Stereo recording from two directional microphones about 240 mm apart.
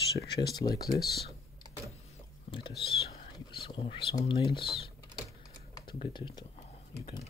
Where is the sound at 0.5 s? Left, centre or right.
Centre.